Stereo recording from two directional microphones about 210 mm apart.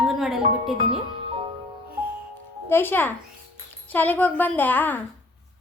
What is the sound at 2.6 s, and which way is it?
A woman's voice, 10° left (ahead or behind).